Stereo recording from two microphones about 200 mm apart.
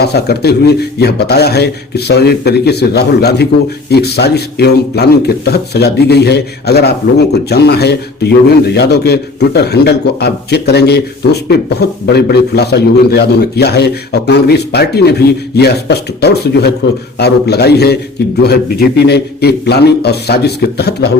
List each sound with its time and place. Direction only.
0.0 s speech: 55° left (ahead or behind)